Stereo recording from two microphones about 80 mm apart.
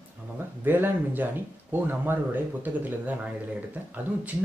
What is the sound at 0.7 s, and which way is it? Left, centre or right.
Speech, right.